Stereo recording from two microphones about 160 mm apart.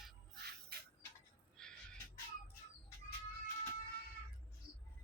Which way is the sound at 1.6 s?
5° left (ahead or behind).